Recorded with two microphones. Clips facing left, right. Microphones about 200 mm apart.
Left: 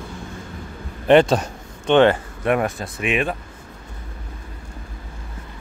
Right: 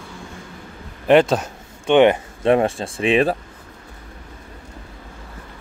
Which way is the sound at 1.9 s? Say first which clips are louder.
Right 1 dB; 20° right (ahead or behind).